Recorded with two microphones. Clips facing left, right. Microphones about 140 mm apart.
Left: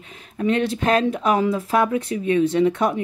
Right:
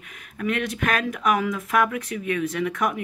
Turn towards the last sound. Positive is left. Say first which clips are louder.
# left 6 dB
turn(degrees=30)  # may be behind; listen again after turning